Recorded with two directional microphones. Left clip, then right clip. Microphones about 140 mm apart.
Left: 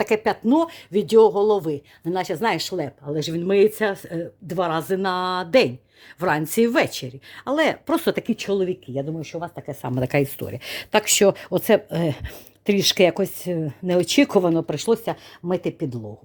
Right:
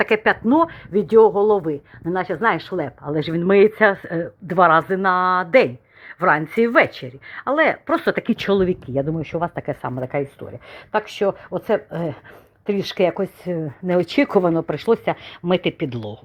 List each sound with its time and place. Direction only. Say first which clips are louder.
0.0 s speech: right 3 dB; 25° left (ahead or behind)
3.0 s speech: right 3 dB; 10° left (ahead or behind)
4.7 s speech: right 7 dB; 30° left (ahead or behind)
8.4 s speech: right 4 dB; centre (ahead or behind)
9.0 s speech: right 6 dB; 20° right (ahead or behind)
10.0 s speech: left 2 dB; 70° left (ahead or behind); by 16.0 s 15° left (ahead or behind)